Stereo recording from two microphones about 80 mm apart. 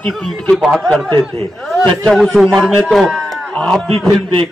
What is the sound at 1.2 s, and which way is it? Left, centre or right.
Speech, centre.